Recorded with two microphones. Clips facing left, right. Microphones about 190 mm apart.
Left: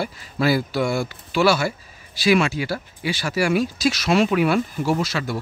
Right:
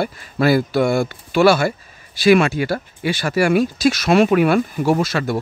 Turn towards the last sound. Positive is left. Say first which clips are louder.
# right 5 dB
turn(degrees=-55)  # may be behind; listen again after turning